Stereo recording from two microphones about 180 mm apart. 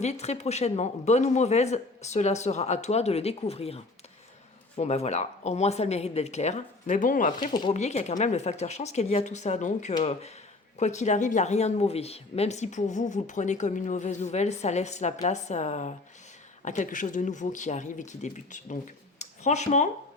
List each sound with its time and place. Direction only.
0.0 s speech: 35° left (ahead or behind)
7.7 s speech: 40° left (ahead or behind)